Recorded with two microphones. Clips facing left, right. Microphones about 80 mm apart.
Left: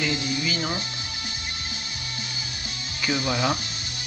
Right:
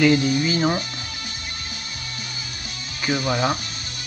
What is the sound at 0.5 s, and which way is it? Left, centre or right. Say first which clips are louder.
Speech: right 7 dB; right.